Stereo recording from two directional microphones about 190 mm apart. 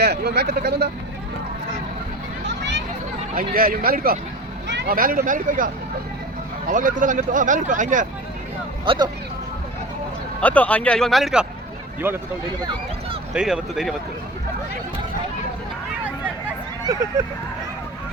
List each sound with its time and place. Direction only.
0.0 s speech: 60° right (ahead or behind)
3.3 s speech: 50° right (ahead or behind)
8.8 s speech: 25° right (ahead or behind)
10.4 s speech: 10° left (ahead or behind); by 12.2 s 10° right (ahead or behind)
13.3 s speech: 5° right (ahead or behind)